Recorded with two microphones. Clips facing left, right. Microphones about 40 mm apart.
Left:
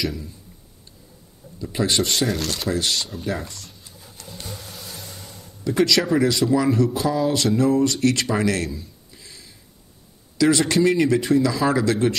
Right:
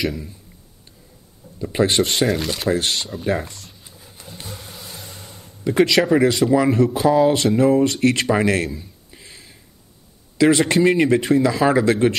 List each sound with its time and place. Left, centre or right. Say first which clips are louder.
1.6 s speech: right 4 dB; right
4.2 s a sound: even; centre
5.3 s speech: right 3 dB; right
8.7 s a sound: right 1 dB; right
10.3 s speech: right 3 dB; right
11.6 s speech: right 4 dB; right